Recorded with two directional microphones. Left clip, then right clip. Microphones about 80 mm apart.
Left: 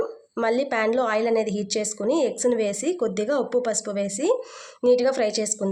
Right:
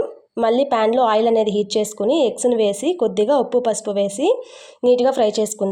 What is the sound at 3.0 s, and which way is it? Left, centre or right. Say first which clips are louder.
A woman's voice: right 8 dB; right.